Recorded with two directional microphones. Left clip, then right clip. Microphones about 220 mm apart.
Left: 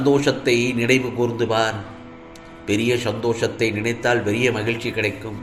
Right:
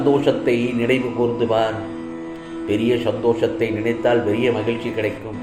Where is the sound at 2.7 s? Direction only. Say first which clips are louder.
Right 1 dB; 35° left (ahead or behind).